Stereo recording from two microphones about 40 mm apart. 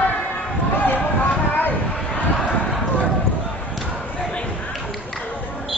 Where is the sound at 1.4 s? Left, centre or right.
Left.